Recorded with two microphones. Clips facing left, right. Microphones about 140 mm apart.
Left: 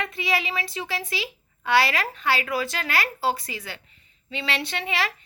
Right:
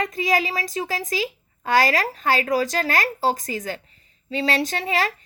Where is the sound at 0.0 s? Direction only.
40° right (ahead or behind).